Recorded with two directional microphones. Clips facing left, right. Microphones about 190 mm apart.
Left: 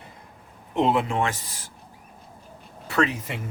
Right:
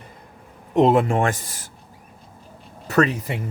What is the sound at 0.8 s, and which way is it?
Speech, 45° right (ahead or behind).